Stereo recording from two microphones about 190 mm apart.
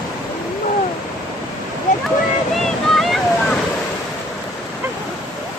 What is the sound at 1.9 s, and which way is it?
Waterfall, 45° left (ahead or behind).